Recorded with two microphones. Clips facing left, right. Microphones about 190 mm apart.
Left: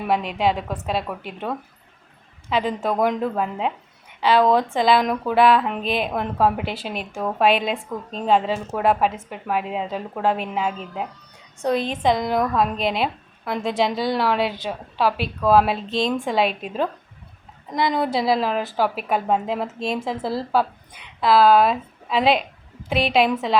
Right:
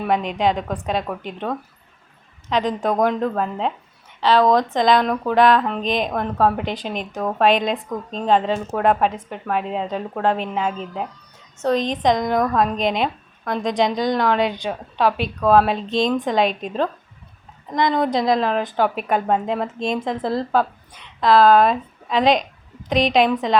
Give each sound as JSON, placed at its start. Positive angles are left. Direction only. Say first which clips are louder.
{"t": 0.0, "sound": "a woman's voice", "louder": "right 1 dB", "side_deg": 5}